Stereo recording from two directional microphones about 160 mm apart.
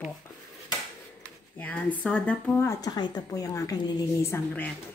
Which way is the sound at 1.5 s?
10° left (ahead or behind).